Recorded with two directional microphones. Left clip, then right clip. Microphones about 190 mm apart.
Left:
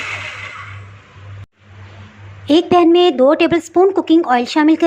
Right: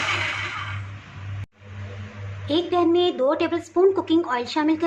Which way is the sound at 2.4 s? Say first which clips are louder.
Left 10 dB; 35° left (ahead or behind).